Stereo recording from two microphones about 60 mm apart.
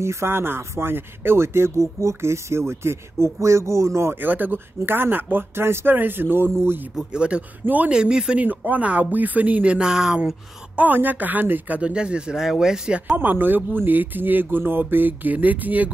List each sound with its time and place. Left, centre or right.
0.0 s speech: right
4.2 s speech: right
7.0 s speech: centre
7.9 s speech: centre
8.4 s speech: right
9.8 s speech: centre
10.8 s speech: right
11.9 s speech: centre
13.1 s speech: right